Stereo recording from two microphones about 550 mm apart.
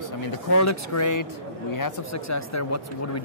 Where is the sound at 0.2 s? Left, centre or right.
Left.